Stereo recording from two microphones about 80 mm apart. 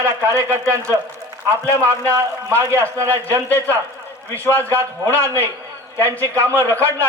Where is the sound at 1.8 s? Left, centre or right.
Right.